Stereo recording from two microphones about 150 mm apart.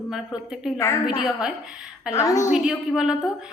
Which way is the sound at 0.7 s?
20° left (ahead or behind).